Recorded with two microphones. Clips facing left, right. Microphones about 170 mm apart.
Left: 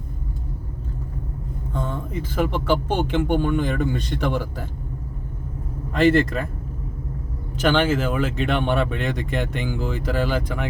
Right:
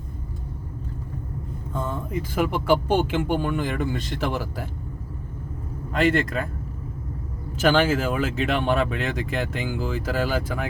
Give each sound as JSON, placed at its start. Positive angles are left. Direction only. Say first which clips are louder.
{"t": 1.7, "sound": "speech", "louder": "even", "side_deg": -10}
{"t": 5.9, "sound": "speech", "louder": "left 4 dB", "side_deg": 0}
{"t": 7.6, "sound": "speech", "louder": "even", "side_deg": -10}